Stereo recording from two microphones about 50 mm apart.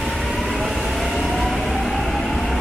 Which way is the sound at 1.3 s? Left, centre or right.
Centre.